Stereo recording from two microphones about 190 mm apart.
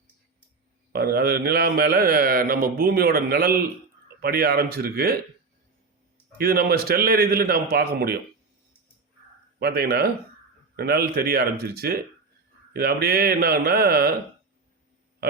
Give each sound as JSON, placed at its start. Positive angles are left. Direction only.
{"t": 0.9, "sound": "speech", "side_deg": -55}
{"t": 6.3, "sound": "a man's voice", "side_deg": -55}
{"t": 9.6, "sound": "a man's voice", "side_deg": -55}